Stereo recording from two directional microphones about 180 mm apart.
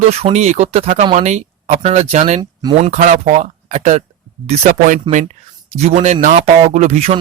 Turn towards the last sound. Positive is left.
turn(degrees=-35)  # may be behind; listen again after turning